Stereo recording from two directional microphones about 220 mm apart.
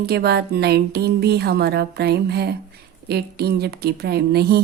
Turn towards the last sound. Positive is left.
turn(degrees=-45)  # may be behind; listen again after turning